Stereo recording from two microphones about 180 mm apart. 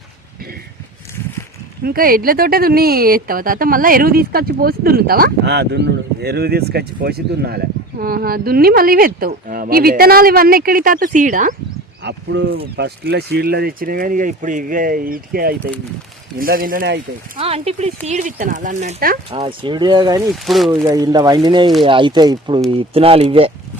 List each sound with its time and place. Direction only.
1.8 s speech: 55° right (ahead or behind)
12.0 s speech: 70° right (ahead or behind); by 16.9 s 50° right (ahead or behind)
17.3 s speech: 30° right (ahead or behind)
19.3 s speech: 30° right (ahead or behind)
20.2 s speech: centre (ahead or behind)
20.7 s speech: 20° right (ahead or behind)